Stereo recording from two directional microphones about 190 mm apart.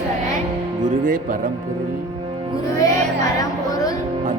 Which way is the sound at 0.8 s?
45° right (ahead or behind).